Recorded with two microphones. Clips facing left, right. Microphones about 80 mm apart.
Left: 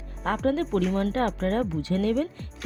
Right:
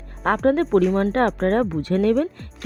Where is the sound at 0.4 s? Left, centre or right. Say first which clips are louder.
Right 7 dB; right.